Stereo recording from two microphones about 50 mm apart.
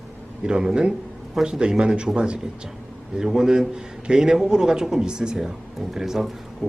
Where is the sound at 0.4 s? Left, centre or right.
Centre.